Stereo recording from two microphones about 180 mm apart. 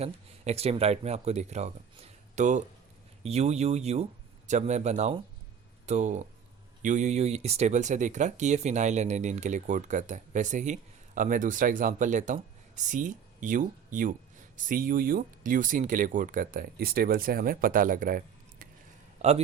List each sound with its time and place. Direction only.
0.0 s speech: 35° right (ahead or behind)